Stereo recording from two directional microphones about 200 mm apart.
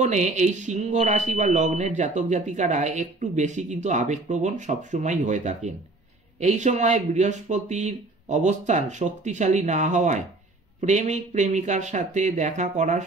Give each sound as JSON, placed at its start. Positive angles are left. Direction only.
{"t": 0.0, "sound": "speech", "side_deg": -35}